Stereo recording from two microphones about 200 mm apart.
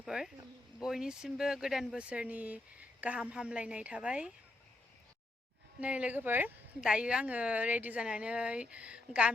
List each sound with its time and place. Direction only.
0.0 s a sound: centre (ahead or behind)
0.8 s speech: 5° right (ahead or behind)
5.8 s speech: 5° right (ahead or behind)